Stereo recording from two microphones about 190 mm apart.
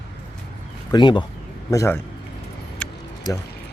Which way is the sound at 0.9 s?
25° left (ahead or behind).